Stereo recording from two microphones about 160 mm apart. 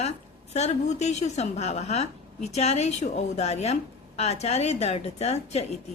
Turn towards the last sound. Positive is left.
turn(degrees=45)  # may be behind; listen again after turning